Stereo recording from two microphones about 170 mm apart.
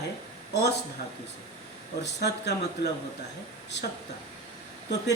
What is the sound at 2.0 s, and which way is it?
Speech, 80° left.